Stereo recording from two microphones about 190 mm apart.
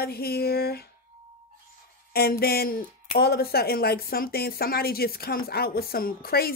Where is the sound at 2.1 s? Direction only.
55° left (ahead or behind).